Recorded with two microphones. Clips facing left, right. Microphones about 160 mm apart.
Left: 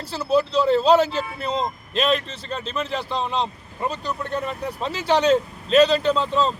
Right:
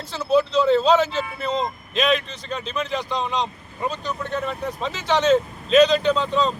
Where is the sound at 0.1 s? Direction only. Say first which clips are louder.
Right 1 dB; 10° left (ahead or behind).